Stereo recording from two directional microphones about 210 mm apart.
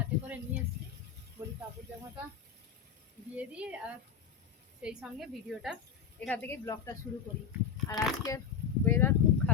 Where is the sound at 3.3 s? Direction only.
5° right (ahead or behind).